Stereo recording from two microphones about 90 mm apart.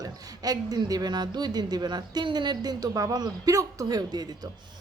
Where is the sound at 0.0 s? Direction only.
45° right (ahead or behind).